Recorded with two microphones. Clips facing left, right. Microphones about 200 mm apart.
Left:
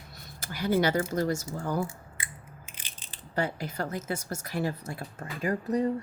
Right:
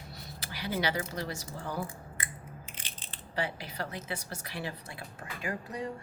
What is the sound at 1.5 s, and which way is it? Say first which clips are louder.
Speech: left 6 dB; 45° left (ahead or behind).